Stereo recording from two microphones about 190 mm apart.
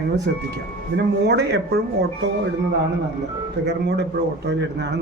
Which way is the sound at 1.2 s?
60° right (ahead or behind).